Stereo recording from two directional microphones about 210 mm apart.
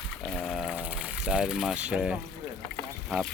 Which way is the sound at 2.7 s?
5° left (ahead or behind).